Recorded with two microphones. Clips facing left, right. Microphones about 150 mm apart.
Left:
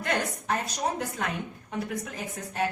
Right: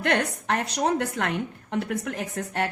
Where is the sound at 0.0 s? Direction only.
75° right (ahead or behind).